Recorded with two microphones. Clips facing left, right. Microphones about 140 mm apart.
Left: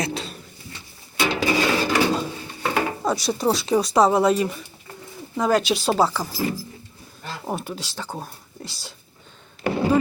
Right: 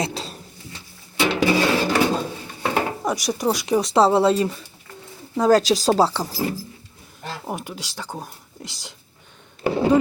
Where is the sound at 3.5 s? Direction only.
15° right (ahead or behind); by 6.2 s 30° right (ahead or behind).